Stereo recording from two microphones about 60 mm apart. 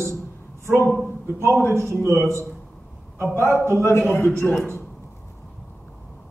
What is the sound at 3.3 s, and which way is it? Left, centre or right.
Speech, right.